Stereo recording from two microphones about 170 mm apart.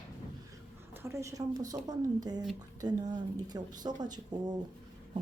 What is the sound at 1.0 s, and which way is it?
Speech, 15° right (ahead or behind).